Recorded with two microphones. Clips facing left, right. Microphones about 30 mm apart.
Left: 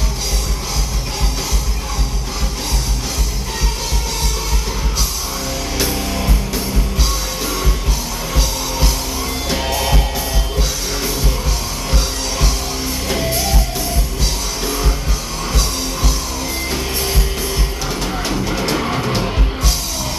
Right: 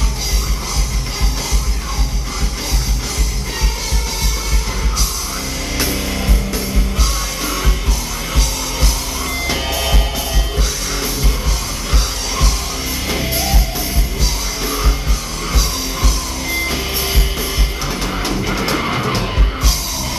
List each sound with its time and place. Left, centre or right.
5.9 s music: centre
9.6 s music: centre
13.1 s music: centre
14.6 s music: centre
16.6 s music: centre